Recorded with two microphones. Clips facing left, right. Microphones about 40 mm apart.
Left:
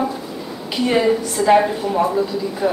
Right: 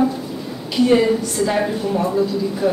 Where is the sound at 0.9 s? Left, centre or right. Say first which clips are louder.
Left 1 dB; centre.